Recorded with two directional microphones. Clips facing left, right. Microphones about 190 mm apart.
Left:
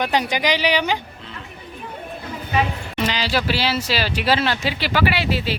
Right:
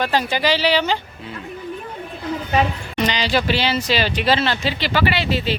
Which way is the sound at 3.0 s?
5° left (ahead or behind).